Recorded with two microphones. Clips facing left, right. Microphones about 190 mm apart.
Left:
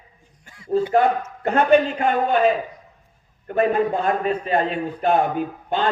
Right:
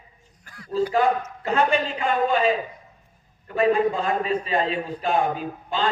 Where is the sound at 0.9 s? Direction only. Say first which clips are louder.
Left 3 dB; 55° left (ahead or behind).